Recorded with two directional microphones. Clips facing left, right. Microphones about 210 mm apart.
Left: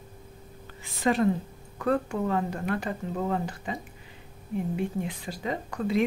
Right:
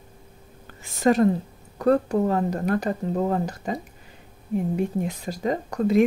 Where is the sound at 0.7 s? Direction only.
45° right (ahead or behind).